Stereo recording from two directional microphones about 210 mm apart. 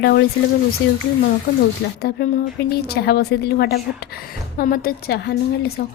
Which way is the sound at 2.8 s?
50° left (ahead or behind).